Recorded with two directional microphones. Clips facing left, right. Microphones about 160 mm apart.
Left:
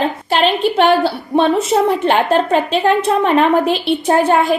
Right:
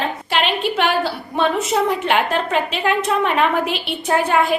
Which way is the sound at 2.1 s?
30° left (ahead or behind).